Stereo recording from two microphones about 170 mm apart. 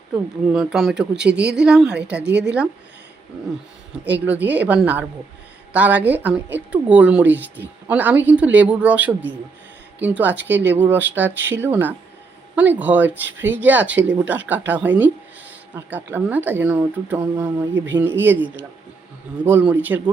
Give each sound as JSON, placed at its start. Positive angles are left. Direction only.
{"t": 0.5, "sound": "speech", "side_deg": 0}
{"t": 4.0, "sound": "a woman's voice", "side_deg": -10}